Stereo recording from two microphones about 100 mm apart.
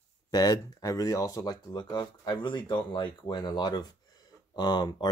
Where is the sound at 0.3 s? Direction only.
40° left (ahead or behind).